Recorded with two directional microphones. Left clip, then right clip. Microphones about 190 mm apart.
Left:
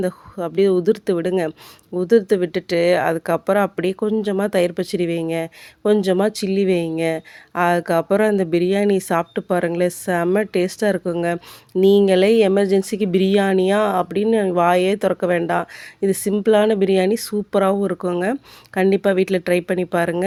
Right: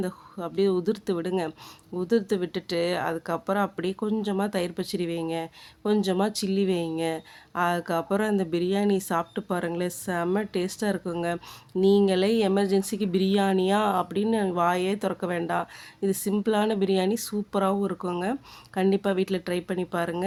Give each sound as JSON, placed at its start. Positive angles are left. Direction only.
{"t": 0.0, "sound": "speech", "side_deg": 30}